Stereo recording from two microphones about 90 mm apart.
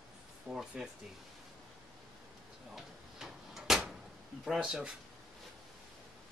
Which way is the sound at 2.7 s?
5° right (ahead or behind).